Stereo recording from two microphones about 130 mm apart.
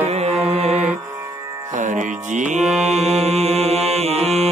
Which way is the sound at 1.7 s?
70° right (ahead or behind).